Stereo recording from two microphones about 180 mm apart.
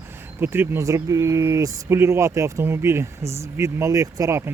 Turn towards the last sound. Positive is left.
turn(degrees=-15)  # may be behind; listen again after turning